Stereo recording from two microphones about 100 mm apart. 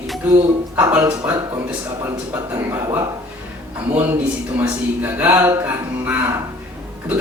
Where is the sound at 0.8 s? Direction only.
20° right (ahead or behind).